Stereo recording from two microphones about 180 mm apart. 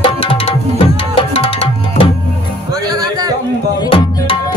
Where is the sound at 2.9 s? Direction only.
20° right (ahead or behind).